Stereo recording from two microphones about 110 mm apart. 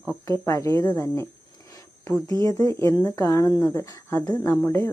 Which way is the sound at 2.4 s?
35° left (ahead or behind).